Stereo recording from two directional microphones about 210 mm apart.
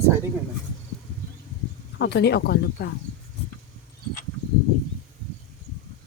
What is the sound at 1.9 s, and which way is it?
Speech, 55° left (ahead or behind).